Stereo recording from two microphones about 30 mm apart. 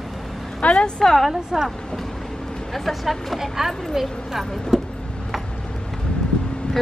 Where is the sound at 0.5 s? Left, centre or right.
Left.